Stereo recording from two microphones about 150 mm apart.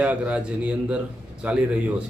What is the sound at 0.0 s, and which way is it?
A man's voice, 10° right (ahead or behind).